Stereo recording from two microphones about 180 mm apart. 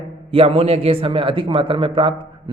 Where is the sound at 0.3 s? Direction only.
30° right (ahead or behind).